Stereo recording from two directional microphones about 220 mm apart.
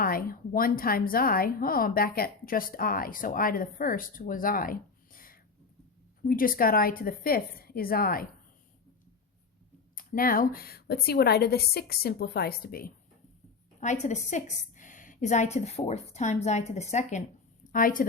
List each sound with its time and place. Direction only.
0.0 s a woman's voice: 40° left (ahead or behind)
9.9 s a woman's voice: 40° left (ahead or behind)